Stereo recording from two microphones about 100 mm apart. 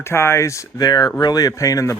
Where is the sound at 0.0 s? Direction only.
25° left (ahead or behind).